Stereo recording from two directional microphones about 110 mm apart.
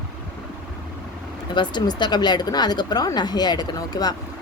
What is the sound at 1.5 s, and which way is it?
Speech, 45° left (ahead or behind).